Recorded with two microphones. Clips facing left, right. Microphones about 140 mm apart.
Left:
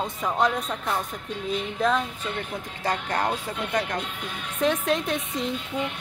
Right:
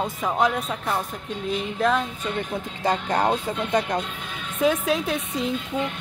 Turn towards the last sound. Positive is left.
turn(degrees=0)  # may be behind; listen again after turning